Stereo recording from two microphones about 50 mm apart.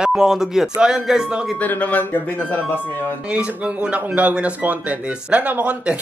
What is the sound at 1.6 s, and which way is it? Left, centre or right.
Speech, left.